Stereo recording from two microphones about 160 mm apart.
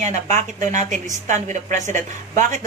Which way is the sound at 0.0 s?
50° right (ahead or behind).